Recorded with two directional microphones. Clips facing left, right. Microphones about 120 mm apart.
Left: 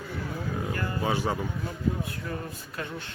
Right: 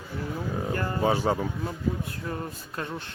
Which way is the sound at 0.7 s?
35° right (ahead or behind).